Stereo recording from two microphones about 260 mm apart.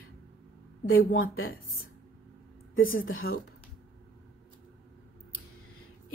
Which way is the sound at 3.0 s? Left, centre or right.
Left.